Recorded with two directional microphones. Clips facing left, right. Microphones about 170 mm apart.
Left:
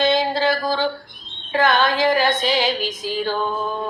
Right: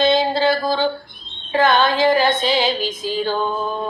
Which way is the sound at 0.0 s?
25° right (ahead or behind).